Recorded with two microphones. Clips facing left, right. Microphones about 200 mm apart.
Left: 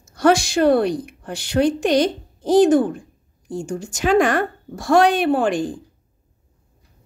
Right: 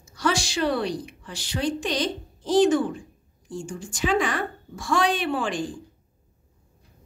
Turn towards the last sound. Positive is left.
turn(degrees=55)  # may be behind; listen again after turning